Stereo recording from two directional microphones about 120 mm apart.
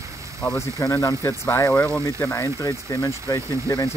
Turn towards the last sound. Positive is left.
turn(degrees=30)  # may be behind; listen again after turning